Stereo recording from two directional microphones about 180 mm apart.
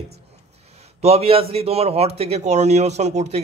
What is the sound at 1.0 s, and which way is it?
Speech, 35° right (ahead or behind).